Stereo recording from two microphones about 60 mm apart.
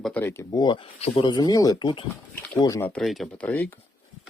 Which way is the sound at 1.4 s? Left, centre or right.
Left.